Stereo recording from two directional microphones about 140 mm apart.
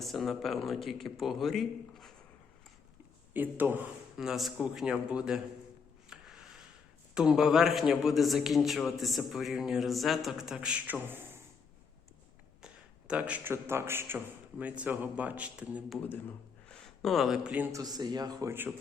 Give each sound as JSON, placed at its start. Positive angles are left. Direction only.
{"t": 0.0, "sound": "a man's voice", "side_deg": 0}
{"t": 3.3, "sound": "a man's voice", "side_deg": -15}
{"t": 6.1, "sound": "music", "side_deg": -5}
{"t": 7.1, "sound": "a man's voice", "side_deg": -5}
{"t": 12.6, "sound": "a man's voice", "side_deg": -10}
{"t": 16.6, "sound": "speech", "side_deg": 5}
{"t": 17.7, "sound": "a man's voice", "side_deg": -25}